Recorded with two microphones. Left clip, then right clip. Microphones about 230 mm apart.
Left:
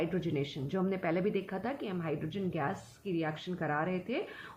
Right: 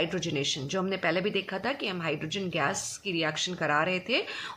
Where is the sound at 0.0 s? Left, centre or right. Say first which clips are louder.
Right 5 dB; right.